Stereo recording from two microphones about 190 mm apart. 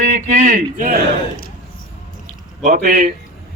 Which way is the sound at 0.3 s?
40° right (ahead or behind).